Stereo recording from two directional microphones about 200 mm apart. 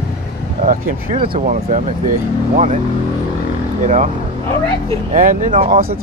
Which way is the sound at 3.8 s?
40° right (ahead or behind).